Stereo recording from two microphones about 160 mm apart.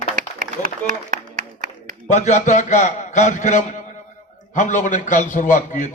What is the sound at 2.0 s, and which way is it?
A man's voice, 45° left (ahead or behind).